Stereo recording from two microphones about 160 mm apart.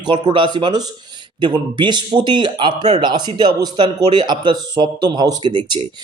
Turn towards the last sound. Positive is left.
turn(degrees=-30)  # may be behind; listen again after turning